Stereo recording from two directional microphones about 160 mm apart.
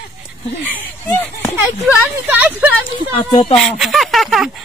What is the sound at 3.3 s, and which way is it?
Speech, 30° left (ahead or behind).